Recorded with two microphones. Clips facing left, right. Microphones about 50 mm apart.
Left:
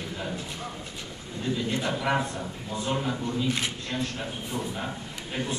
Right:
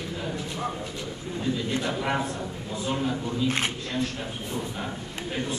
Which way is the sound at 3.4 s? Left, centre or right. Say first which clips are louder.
Right 4 dB; right.